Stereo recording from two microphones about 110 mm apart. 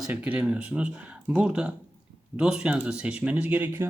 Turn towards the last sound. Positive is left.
turn(degrees=-15)  # may be behind; listen again after turning